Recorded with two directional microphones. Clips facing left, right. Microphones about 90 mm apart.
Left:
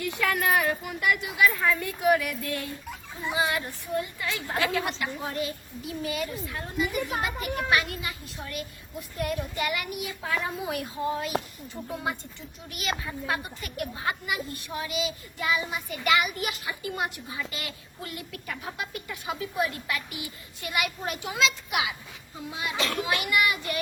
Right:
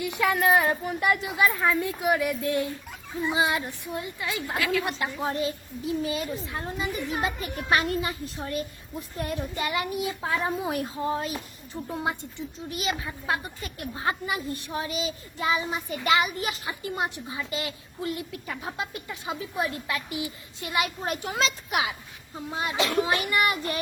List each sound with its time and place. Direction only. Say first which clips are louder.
0.0 s a woman's voice: right 3 dB; 20° right (ahead or behind)
4.5 s a woman's voice: even; 30° left (ahead or behind)
4.9 s a woman's voice: right 3 dB; 30° right (ahead or behind)
7.7 s a child's voice: right 5 dB; 35° right (ahead or behind)
22.8 s a woman's voice: right 5 dB; 20° right (ahead or behind)
23.2 s a child's voice: right 1 dB; 35° right (ahead or behind)